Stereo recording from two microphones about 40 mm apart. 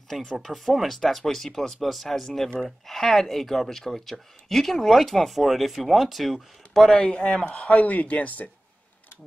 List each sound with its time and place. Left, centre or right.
0.4 s speech: centre
7.0 s a man's voice: left
7.5 s speech: left